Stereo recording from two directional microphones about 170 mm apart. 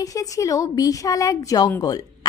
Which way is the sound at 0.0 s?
20° left (ahead or behind).